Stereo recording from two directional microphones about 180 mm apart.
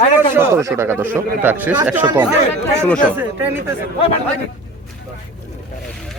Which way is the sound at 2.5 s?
5° left (ahead or behind).